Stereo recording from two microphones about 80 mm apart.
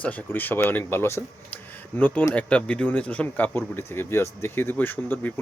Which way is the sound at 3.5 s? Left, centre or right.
Left.